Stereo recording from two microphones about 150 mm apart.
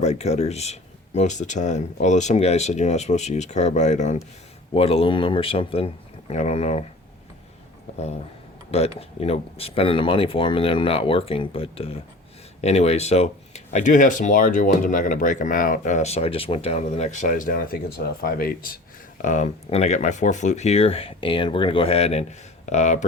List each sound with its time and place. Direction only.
0.0 s speech: 50° left (ahead or behind)
4.7 s speech: 40° left (ahead or behind)
7.9 s speech: 45° left (ahead or behind); by 18.8 s 75° left (ahead or behind)
19.2 s speech: 55° left (ahead or behind)